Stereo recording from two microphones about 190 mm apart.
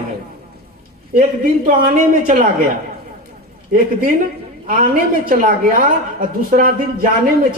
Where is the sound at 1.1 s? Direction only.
45° right (ahead or behind).